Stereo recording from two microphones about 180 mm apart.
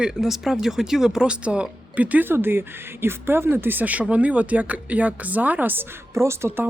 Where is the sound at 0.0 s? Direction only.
Centre (ahead or behind).